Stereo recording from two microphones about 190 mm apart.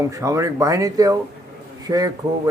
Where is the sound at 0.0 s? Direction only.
15° right (ahead or behind).